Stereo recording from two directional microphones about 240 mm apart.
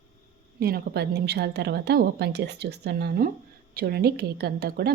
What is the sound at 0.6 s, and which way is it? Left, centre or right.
A woman's voice, right.